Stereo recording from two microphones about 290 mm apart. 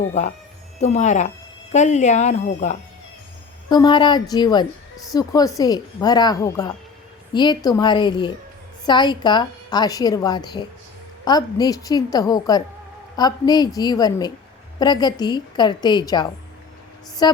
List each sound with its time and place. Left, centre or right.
0.1 s a woman's voice: left